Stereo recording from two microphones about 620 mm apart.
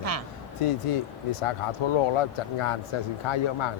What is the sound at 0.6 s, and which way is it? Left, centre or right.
Speech, left.